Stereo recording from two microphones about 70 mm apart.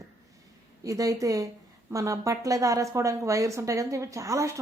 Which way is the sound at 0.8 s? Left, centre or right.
Right.